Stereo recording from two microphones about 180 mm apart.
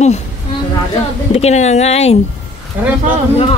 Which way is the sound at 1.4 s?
40° left (ahead or behind).